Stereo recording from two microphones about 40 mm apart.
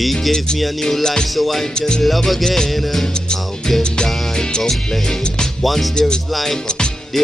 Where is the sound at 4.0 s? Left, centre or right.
Centre.